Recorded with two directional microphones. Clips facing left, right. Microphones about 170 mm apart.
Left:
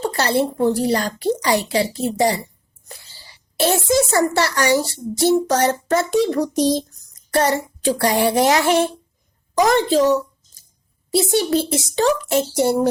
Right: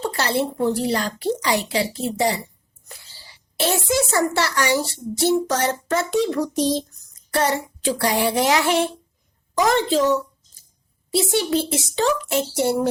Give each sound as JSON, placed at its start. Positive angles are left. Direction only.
{"t": 0.0, "sound": "a child's voice", "side_deg": 40}
{"t": 3.6, "sound": "a child's voice", "side_deg": 40}
{"t": 7.3, "sound": "child singing", "side_deg": 40}
{"t": 9.6, "sound": "a child's voice", "side_deg": 40}